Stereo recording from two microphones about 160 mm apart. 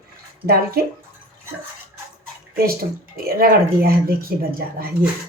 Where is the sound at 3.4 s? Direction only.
70° right (ahead or behind).